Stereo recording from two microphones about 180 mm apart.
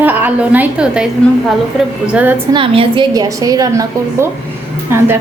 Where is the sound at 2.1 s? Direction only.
10° right (ahead or behind).